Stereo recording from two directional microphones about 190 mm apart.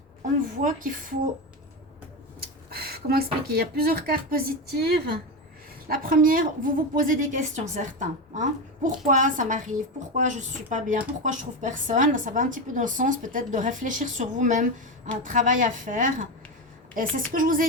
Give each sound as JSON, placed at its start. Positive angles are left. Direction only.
{"t": 0.6, "sound": "speech", "side_deg": -45}
{"t": 2.4, "sound": "speech", "side_deg": -55}
{"t": 5.9, "sound": "a woman's voice", "side_deg": -50}